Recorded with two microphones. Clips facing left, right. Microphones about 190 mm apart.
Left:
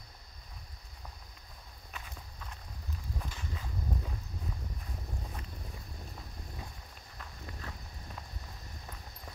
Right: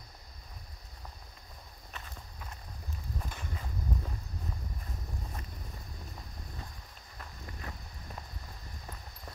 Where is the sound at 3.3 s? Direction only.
55° right (ahead or behind).